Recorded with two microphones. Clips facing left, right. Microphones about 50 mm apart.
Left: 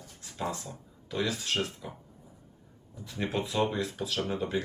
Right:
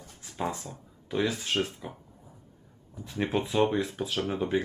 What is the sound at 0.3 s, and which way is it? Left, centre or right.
Speech, right.